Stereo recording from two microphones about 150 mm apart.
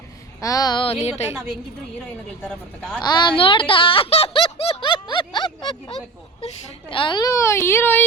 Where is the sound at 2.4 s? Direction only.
10° left (ahead or behind).